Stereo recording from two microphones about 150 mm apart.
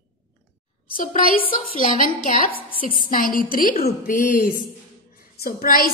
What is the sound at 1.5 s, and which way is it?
A woman's voice, 65° left (ahead or behind).